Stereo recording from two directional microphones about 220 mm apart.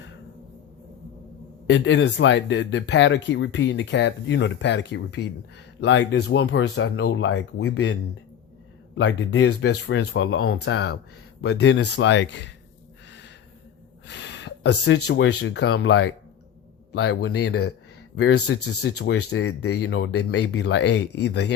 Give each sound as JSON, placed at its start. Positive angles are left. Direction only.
{"t": 1.6, "sound": "speech", "side_deg": 55}
{"t": 9.0, "sound": "speech", "side_deg": 60}
{"t": 13.1, "sound": "a sound", "side_deg": 50}
{"t": 15.4, "sound": "speech", "side_deg": 55}